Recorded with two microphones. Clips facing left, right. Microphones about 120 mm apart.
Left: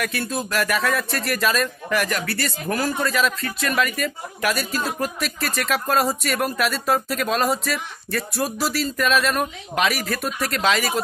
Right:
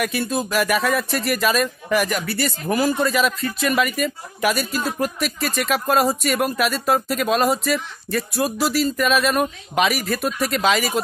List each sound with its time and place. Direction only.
0.0 s speech: 5° right (ahead or behind)